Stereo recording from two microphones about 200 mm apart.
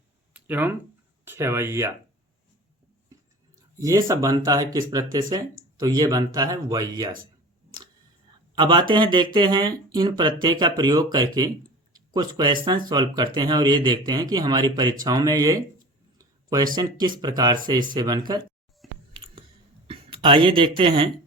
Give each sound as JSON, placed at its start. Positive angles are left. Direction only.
{"t": 0.3, "sound": "speech", "side_deg": -10}
{"t": 3.8, "sound": "speech", "side_deg": -15}
{"t": 8.5, "sound": "speech", "side_deg": -25}
{"t": 16.1, "sound": "a sound", "side_deg": -20}
{"t": 16.7, "sound": "speech", "side_deg": -20}
{"t": 19.1, "sound": "a sound", "side_deg": -25}
{"t": 19.9, "sound": "speech", "side_deg": -25}